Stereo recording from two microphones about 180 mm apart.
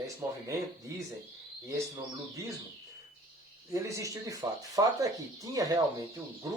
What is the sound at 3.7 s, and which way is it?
Speech, 15° right (ahead or behind).